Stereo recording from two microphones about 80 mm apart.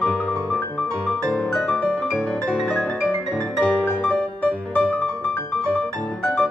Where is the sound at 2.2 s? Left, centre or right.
Centre.